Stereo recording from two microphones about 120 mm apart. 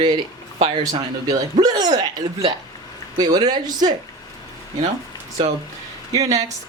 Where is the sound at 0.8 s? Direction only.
30° right (ahead or behind).